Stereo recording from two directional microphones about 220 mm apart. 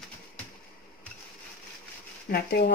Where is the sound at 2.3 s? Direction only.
45° left (ahead or behind).